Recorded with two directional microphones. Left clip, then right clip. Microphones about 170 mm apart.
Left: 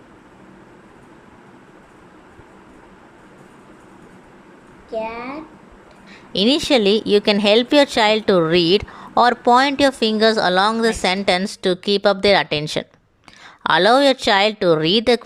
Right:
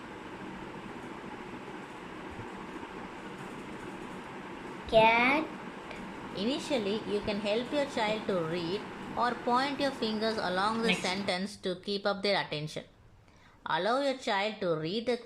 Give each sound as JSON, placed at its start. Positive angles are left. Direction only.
{"t": 4.9, "sound": "a woman's voice", "side_deg": 20}
{"t": 6.3, "sound": "a woman's voice", "side_deg": 65}